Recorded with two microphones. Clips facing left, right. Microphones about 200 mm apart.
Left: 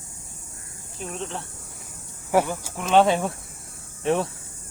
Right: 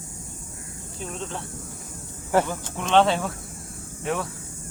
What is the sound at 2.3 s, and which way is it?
Speech, 10° left (ahead or behind).